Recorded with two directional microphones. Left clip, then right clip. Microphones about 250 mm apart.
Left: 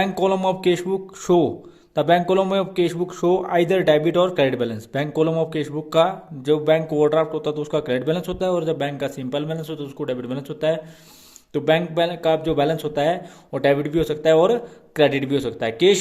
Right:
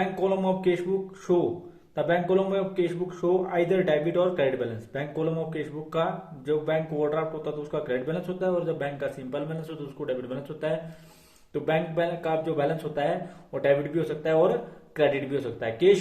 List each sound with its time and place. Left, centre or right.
0.2 s a man's voice: left